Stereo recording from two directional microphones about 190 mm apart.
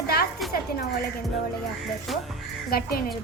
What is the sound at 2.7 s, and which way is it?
Speech, 55° left (ahead or behind).